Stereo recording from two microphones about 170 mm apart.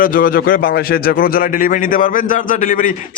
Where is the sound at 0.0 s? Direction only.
55° left (ahead or behind).